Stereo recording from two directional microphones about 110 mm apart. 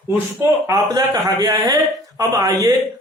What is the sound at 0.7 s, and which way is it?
A man's voice, 35° right (ahead or behind).